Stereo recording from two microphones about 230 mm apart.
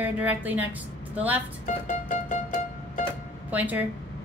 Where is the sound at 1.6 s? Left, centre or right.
Left.